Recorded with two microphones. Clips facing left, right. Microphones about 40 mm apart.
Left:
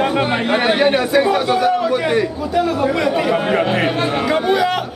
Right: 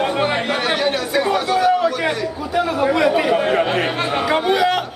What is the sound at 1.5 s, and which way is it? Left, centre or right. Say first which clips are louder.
A man's voice: even; centre.